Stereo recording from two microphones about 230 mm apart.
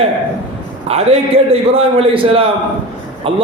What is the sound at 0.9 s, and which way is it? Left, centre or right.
A man's voice, right.